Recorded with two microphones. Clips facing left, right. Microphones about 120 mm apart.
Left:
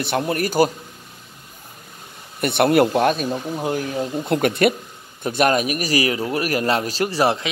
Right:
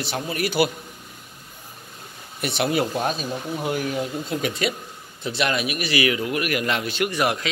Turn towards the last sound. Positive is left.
turn(degrees=30)  # may be behind; listen again after turning